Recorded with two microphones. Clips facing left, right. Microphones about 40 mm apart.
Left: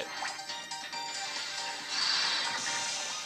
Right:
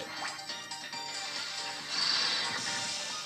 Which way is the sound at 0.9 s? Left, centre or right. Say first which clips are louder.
Left 1 dB; centre.